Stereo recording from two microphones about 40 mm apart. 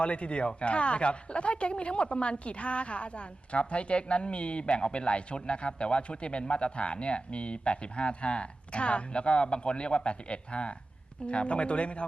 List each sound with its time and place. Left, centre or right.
0.0 s speech: left